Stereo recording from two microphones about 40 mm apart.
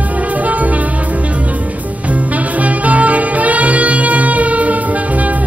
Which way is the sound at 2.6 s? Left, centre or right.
Right.